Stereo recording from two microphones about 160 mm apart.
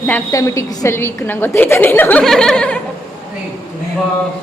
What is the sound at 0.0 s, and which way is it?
A woman's voice, 15° left (ahead or behind).